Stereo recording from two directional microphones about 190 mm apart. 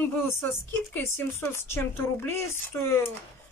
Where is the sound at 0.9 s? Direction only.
10° left (ahead or behind).